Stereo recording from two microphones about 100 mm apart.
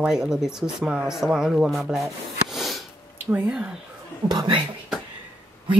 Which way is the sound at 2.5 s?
Centre (ahead or behind).